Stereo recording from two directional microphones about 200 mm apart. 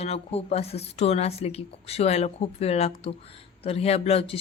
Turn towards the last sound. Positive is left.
turn(degrees=30)  # may be behind; listen again after turning